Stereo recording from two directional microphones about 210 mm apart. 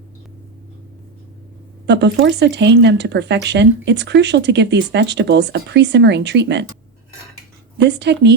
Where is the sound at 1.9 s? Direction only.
55° right (ahead or behind).